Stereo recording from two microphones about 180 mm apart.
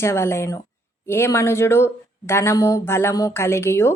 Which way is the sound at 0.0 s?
15° left (ahead or behind).